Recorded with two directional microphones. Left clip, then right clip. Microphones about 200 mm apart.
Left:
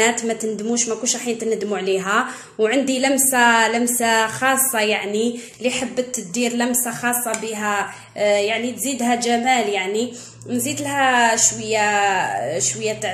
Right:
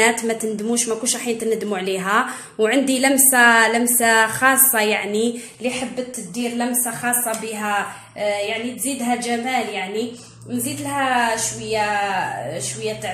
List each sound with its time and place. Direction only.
0.0 s a woman's voice: 5° right (ahead or behind)
5.6 s speech: 10° left (ahead or behind)
8.2 s a woman's voice: 30° left (ahead or behind)